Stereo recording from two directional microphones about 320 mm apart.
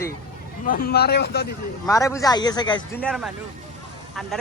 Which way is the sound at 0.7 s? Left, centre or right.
Left.